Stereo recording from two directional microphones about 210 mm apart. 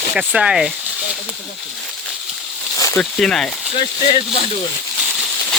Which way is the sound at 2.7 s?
15° left (ahead or behind).